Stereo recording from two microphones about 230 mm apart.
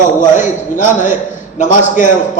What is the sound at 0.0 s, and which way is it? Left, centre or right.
A man's voice, left.